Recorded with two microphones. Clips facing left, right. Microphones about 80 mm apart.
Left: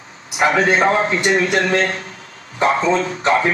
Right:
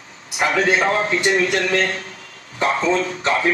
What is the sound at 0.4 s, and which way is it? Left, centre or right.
A man's voice, left.